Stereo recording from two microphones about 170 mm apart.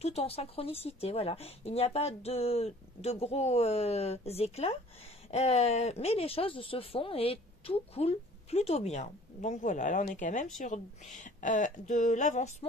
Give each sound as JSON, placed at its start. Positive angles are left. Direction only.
{"t": 0.0, "sound": "speech", "side_deg": 40}